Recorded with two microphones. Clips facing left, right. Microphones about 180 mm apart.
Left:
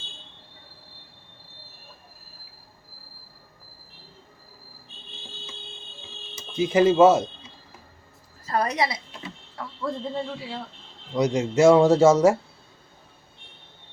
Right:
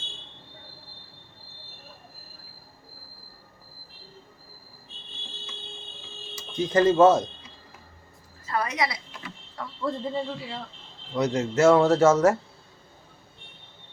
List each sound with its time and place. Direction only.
6.6 s speech: 10° left (ahead or behind)
8.4 s a sound: 35° left (ahead or behind)
9.8 s a man's voice: centre (ahead or behind)
11.1 s speech: 15° left (ahead or behind)